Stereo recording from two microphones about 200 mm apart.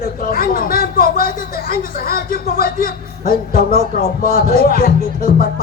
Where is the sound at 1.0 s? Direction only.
45° left (ahead or behind).